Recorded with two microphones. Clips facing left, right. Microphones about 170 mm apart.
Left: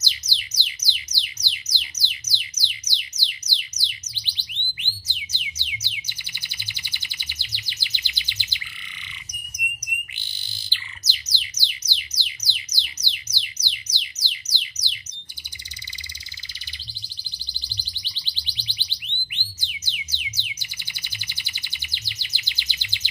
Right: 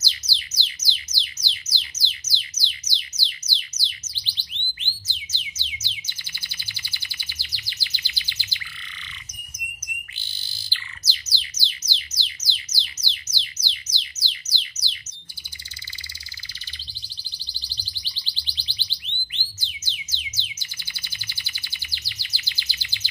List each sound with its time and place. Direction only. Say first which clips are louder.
0.0 s music: even; 15° left (ahead or behind)
10.1 s bird: left 1 dB; 15° left (ahead or behind)
17.6 s music: left 3 dB; 10° left (ahead or behind)